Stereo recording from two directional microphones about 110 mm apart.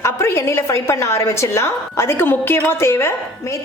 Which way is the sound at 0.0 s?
25° left (ahead or behind).